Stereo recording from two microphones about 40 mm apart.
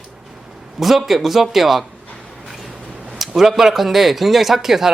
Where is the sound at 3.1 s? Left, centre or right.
Centre.